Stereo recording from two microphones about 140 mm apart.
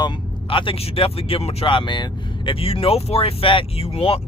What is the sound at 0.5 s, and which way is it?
Speech, 40° left (ahead or behind).